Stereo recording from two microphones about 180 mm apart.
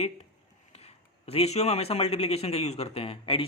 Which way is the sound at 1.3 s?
35° left (ahead or behind).